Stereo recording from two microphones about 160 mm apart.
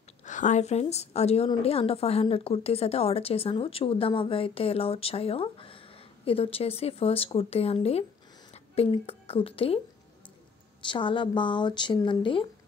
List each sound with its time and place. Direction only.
0.2 s a woman's voice: 50° left (ahead or behind)
10.9 s a woman's voice: 30° left (ahead or behind)